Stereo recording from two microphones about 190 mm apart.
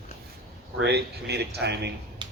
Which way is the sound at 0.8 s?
60° right (ahead or behind).